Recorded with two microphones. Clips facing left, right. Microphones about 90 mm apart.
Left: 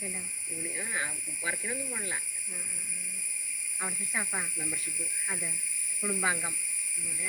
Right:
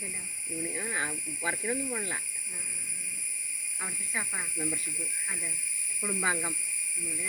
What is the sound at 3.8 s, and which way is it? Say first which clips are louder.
Speech: left 1 dB; 5° left (ahead or behind).